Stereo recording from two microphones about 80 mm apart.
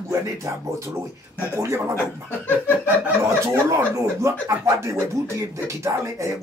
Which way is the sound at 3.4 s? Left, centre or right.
Right.